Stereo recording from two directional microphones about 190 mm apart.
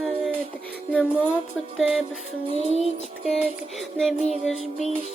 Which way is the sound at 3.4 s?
Centre (ahead or behind).